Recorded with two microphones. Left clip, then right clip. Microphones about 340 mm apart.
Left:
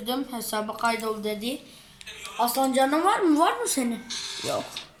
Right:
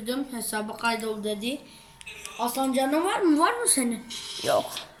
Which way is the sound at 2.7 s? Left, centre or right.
Centre.